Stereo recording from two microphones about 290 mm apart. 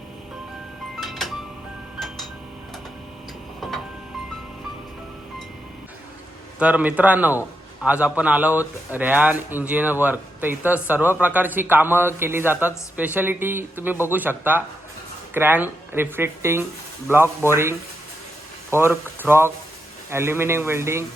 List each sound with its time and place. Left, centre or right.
0.9 s music: centre
2.0 s tick-tock: centre
3.6 s music: centre
6.6 s a man's voice: centre